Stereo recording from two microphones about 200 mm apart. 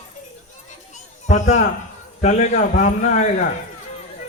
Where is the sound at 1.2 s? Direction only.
35° left (ahead or behind).